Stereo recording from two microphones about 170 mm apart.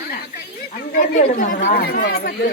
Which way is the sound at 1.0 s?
50° left (ahead or behind).